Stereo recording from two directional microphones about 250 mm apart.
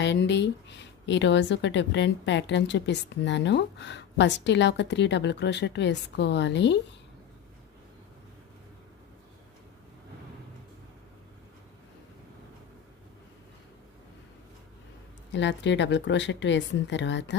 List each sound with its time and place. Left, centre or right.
0.0 s a woman's voice: left
15.3 s a woman's voice: left